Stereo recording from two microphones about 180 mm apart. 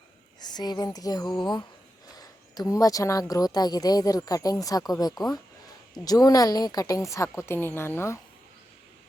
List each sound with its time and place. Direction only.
0.3 s a woman's voice: 20° left (ahead or behind)